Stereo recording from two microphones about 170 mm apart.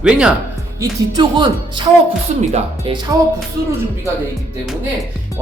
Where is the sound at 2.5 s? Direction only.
40° right (ahead or behind).